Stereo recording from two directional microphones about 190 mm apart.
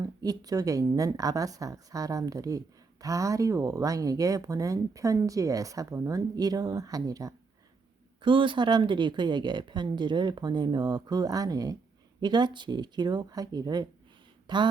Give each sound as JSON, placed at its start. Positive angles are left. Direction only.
{"t": 0.0, "sound": "a woman's voice", "side_deg": -20}